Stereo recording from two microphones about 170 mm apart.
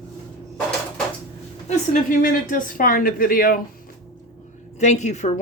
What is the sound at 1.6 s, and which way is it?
A woman's voice, 55° left (ahead or behind).